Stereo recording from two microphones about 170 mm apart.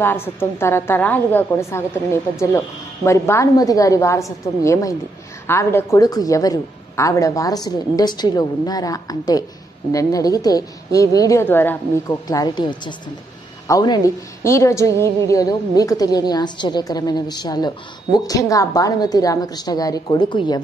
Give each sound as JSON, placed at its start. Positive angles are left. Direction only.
{"t": 0.0, "sound": "a woman's voice", "side_deg": 15}
{"t": 3.1, "sound": "a woman's voice", "side_deg": 15}